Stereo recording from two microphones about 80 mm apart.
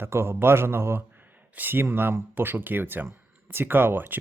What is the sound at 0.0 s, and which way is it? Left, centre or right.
Speech, right.